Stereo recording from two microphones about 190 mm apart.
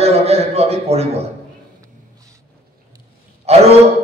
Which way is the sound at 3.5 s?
35° right (ahead or behind).